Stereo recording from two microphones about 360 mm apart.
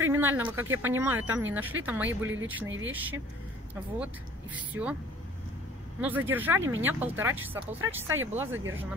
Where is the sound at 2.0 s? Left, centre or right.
Right.